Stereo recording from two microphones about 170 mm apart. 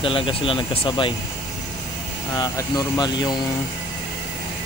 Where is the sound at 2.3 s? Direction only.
20° left (ahead or behind).